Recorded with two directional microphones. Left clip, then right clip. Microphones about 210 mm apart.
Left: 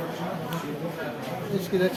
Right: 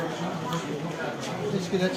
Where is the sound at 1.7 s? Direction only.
20° left (ahead or behind).